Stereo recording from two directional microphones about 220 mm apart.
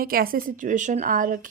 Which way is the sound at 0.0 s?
40° right (ahead or behind).